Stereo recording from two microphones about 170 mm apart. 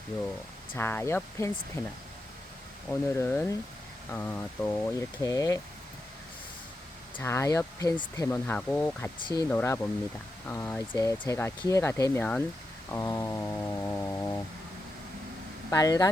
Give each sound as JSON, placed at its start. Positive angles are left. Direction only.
{"t": 0.8, "sound": "speech", "side_deg": 15}
{"t": 3.2, "sound": "speech", "side_deg": 10}
{"t": 7.2, "sound": "speech", "side_deg": 15}
{"t": 12.9, "sound": "a sound", "side_deg": 15}
{"t": 15.7, "sound": "speech", "side_deg": 20}